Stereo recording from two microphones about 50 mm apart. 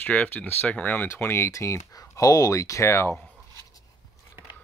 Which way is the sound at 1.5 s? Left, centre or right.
Left.